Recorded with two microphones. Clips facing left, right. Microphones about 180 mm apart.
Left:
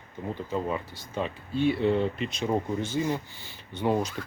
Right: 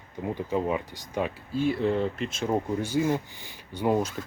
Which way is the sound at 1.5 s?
Centre (ahead or behind).